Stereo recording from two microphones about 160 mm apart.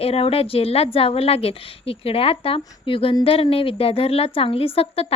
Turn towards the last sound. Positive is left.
turn(degrees=35)  # may be behind; listen again after turning